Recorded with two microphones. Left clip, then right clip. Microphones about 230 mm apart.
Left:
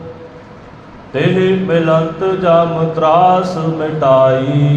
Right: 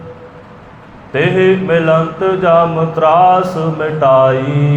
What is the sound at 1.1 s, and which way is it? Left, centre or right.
Mantra, right.